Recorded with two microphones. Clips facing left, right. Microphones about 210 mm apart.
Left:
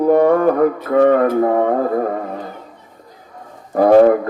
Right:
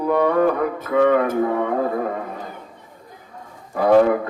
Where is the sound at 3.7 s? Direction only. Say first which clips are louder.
Left 5 dB; 45° left (ahead or behind).